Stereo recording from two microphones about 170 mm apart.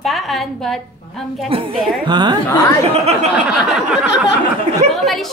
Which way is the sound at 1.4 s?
30° right (ahead or behind).